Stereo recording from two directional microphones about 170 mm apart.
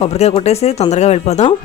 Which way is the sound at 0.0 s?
40° left (ahead or behind).